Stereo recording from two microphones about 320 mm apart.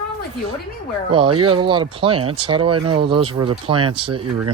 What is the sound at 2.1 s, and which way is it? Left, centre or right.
Speech, right.